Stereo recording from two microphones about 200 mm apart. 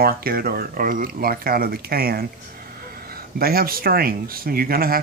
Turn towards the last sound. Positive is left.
turn(degrees=-50)  # may be behind; listen again after turning